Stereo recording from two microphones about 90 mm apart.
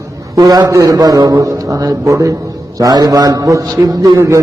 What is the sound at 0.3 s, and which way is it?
A man's voice, 45° right (ahead or behind).